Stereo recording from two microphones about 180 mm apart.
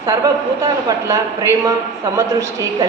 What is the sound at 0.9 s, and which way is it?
A woman's voice, 20° right (ahead or behind).